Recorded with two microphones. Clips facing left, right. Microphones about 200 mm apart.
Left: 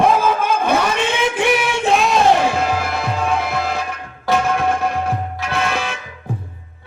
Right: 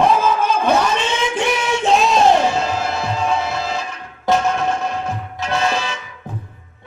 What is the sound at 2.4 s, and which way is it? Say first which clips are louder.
Music: even; 55° left (ahead or behind).